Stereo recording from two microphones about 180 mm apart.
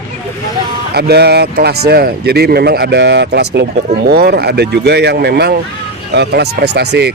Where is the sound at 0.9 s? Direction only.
65° right (ahead or behind).